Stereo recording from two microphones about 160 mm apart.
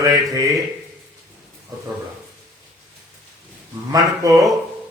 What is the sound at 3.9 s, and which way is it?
Speech, 20° right (ahead or behind).